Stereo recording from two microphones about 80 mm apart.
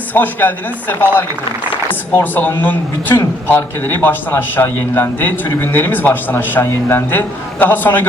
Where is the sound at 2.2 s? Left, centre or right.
Left.